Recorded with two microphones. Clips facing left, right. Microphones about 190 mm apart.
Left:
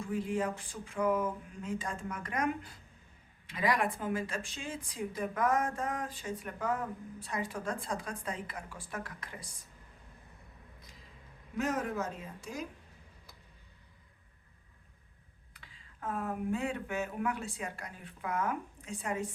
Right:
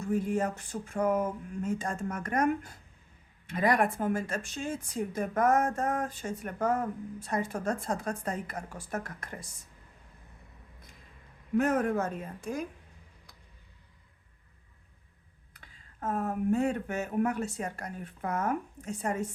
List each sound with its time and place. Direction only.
0.0 s speech: 45° right (ahead or behind)
11.5 s speech: 55° right (ahead or behind)
15.5 s speech: 45° right (ahead or behind)